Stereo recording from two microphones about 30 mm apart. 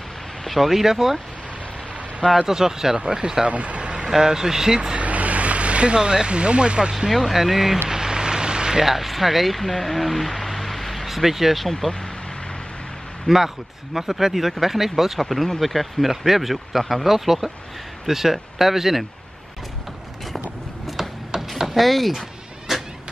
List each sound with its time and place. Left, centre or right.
0.5 s speech: centre
2.3 s speech: centre
3.4 s speech: right
4.2 s speech: centre
4.9 s speech: right
7.1 s speech: centre
7.9 s vehicle: right
8.8 s speech: centre
11.8 s speech: centre
13.3 s speech: left
13.9 s speech: centre
21.6 s speech: centre
22.7 s vehicle: centre